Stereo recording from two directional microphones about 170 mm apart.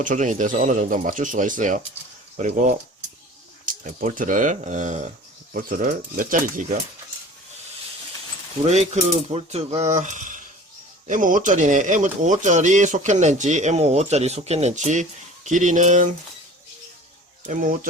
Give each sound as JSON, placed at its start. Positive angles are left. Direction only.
{"t": 0.0, "sound": "speech", "side_deg": -50}
{"t": 8.6, "sound": "cutlery", "side_deg": -40}
{"t": 11.0, "sound": "speech", "side_deg": -50}
{"t": 17.5, "sound": "speech", "side_deg": -55}